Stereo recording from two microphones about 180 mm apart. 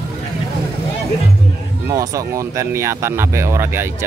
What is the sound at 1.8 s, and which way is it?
Speech, 20° right (ahead or behind).